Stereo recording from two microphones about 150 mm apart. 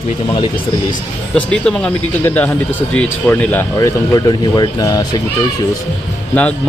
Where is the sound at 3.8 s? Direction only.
25° left (ahead or behind).